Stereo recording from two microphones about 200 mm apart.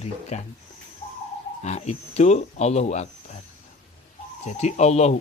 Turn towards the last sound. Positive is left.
turn(degrees=35)  # may be behind; listen again after turning